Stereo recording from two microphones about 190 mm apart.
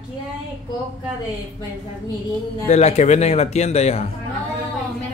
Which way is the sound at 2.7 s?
35° left (ahead or behind).